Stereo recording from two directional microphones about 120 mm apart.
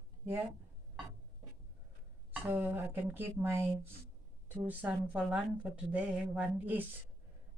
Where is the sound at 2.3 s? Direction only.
15° right (ahead or behind).